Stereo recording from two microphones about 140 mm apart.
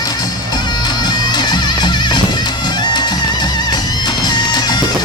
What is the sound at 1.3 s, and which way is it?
Music, 30° left (ahead or behind).